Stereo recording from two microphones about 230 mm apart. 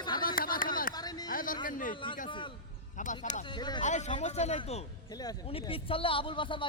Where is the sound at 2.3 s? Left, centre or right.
Left.